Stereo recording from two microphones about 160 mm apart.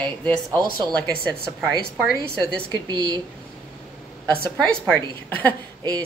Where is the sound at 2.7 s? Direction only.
25° right (ahead or behind).